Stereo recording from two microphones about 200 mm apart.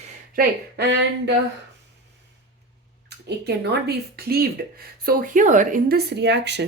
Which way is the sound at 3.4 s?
50° right (ahead or behind).